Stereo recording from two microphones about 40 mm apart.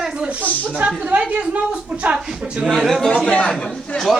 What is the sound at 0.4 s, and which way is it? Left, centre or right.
Speech, left.